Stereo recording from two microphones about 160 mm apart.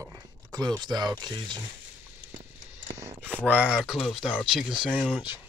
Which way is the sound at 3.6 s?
5° right (ahead or behind).